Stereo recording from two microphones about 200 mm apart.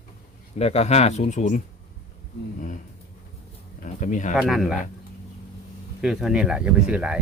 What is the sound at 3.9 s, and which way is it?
Speech, 40° left (ahead or behind).